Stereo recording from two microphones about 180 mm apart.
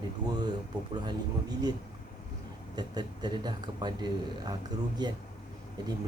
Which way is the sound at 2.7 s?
25° right (ahead or behind).